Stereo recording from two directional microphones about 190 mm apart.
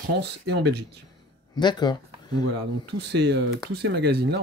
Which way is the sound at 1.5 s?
25° left (ahead or behind).